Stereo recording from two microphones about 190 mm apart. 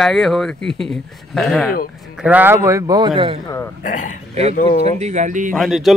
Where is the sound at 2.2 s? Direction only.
10° right (ahead or behind); by 3.4 s 25° right (ahead or behind).